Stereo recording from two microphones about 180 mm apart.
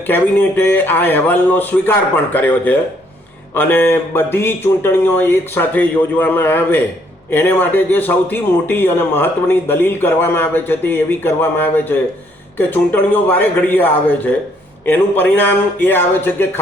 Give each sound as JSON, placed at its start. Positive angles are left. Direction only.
{"t": 0.1, "sound": "a man's voice", "side_deg": 10}